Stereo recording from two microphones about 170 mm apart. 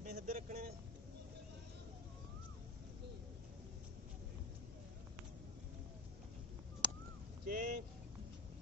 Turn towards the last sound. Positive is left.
turn(degrees=-60)  # may be behind; listen again after turning